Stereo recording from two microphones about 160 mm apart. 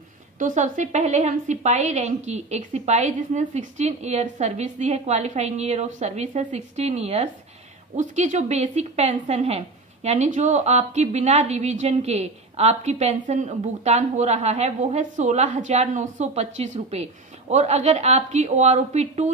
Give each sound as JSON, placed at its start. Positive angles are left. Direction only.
{"t": 0.4, "sound": "a woman's voice", "side_deg": -50}